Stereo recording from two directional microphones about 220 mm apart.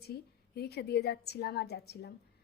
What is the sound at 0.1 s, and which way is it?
A woman's voice, 45° left (ahead or behind).